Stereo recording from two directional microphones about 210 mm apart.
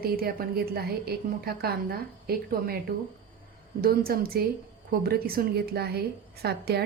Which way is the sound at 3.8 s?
45° right (ahead or behind).